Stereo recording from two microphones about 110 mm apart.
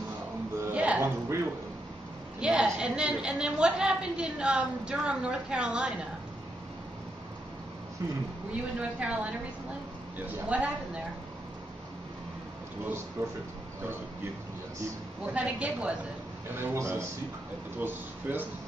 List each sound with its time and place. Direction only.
0.7 s a sound: 10° right (ahead or behind)
2.4 s a woman's voice: 10° right (ahead or behind)
8.7 s a woman's voice: 10° right (ahead or behind)
13.2 s a man's voice: 30° right (ahead or behind)
15.3 s a woman's voice: 10° right (ahead or behind)
16.5 s a man's voice: 20° right (ahead or behind)